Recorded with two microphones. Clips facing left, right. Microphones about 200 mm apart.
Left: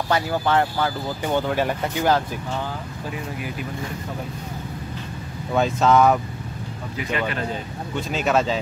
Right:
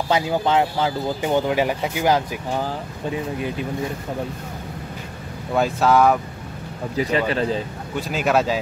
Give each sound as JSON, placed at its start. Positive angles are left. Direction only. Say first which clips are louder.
{"t": 0.1, "sound": "speech", "louder": "right 2 dB", "side_deg": -15}
{"t": 5.5, "sound": "speech", "louder": "even", "side_deg": -5}
{"t": 7.0, "sound": "speech", "louder": "right 5 dB", "side_deg": -35}
{"t": 7.9, "sound": "speech", "louder": "right 1 dB", "side_deg": -5}